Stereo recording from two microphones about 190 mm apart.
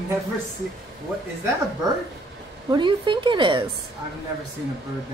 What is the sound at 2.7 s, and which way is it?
Speech, 25° right (ahead or behind).